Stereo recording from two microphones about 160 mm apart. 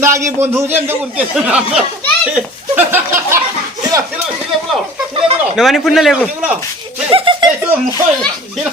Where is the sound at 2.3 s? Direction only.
10° right (ahead or behind).